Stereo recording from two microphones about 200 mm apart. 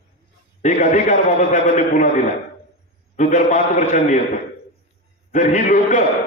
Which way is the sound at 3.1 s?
40° left (ahead or behind).